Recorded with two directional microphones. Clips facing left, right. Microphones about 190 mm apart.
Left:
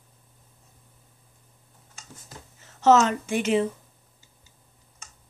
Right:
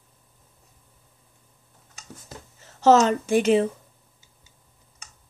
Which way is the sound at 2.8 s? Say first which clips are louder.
Right 2 dB; 35° right (ahead or behind).